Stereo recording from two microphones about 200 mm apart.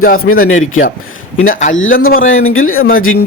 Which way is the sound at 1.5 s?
40° left (ahead or behind).